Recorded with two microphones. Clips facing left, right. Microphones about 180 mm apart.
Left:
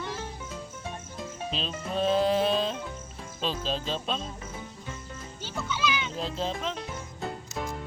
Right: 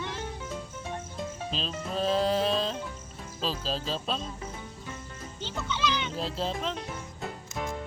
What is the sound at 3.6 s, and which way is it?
Speech, centre (ahead or behind).